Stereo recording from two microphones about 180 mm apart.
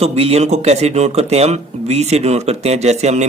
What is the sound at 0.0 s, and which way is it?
Speech, 35° right (ahead or behind).